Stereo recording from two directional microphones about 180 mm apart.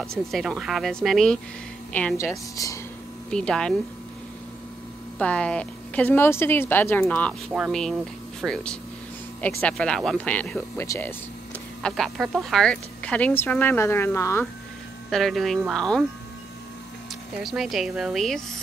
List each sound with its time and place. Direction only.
0.3 s a woman's voice: centre (ahead or behind); by 2.8 s 20° left (ahead or behind)
3.3 s a woman's voice: 5° left (ahead or behind)
5.2 s a woman's voice: 5° left (ahead or behind)
11.8 s speech: centre (ahead or behind)
15.0 s a woman's voice: centre (ahead or behind)
17.4 s a woman's voice: centre (ahead or behind)